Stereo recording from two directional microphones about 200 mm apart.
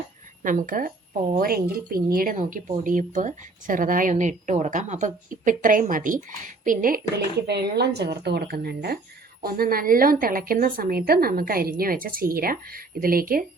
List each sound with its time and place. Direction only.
0.4 s speech: 40° right (ahead or behind)